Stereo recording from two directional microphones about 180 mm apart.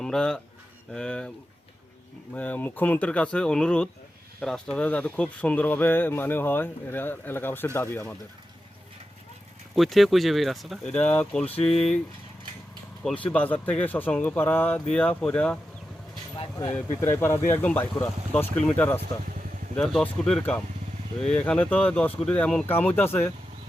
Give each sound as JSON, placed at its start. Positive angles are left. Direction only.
{"t": 0.0, "sound": "speech", "side_deg": 5}
{"t": 2.3, "sound": "speech", "side_deg": 10}
{"t": 9.7, "sound": "speech", "side_deg": 0}
{"t": 13.1, "sound": "speech", "side_deg": 5}
{"t": 16.4, "sound": "speech", "side_deg": 30}
{"t": 16.9, "sound": "speech", "side_deg": 15}